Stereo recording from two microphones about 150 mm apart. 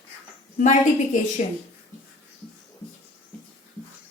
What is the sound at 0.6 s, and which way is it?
Speech, 55° left (ahead or behind).